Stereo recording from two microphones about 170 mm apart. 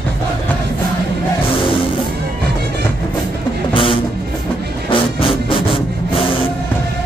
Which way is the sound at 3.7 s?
30° left (ahead or behind).